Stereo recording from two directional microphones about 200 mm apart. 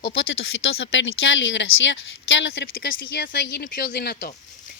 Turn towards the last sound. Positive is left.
turn(degrees=50)  # may be behind; listen again after turning